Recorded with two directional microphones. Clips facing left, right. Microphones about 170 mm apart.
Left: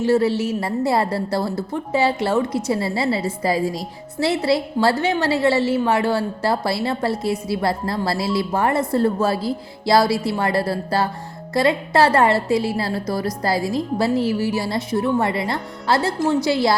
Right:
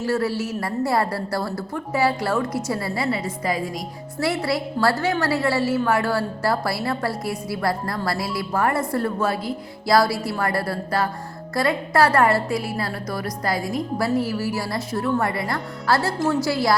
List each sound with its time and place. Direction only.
0.0 s a woman's voice: 25° left (ahead or behind)